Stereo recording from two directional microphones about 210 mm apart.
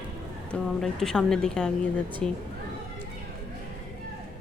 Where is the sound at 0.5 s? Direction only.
Centre (ahead or behind).